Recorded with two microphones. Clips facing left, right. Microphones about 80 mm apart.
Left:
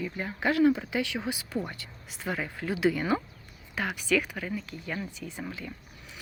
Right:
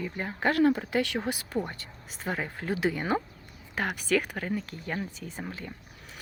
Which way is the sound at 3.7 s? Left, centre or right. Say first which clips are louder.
Even; right.